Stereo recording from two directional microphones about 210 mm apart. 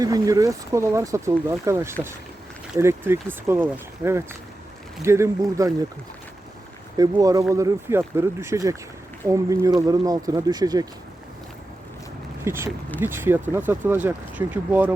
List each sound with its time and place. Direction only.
0.0 s speech: 15° right (ahead or behind)
6.9 s speech: 15° right (ahead or behind)
12.5 s speech: 10° right (ahead or behind)